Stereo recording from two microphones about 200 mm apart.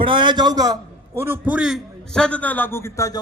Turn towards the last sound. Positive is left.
turn(degrees=15)  # may be behind; listen again after turning